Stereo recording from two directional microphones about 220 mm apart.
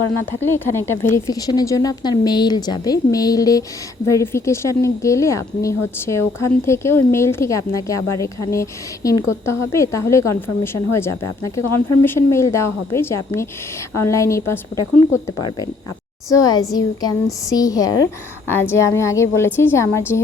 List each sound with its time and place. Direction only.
0.3 s speech: 10° left (ahead or behind)
16.3 s speech: 15° left (ahead or behind)